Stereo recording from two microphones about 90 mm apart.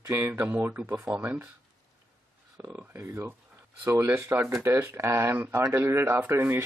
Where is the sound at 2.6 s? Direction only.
20° right (ahead or behind).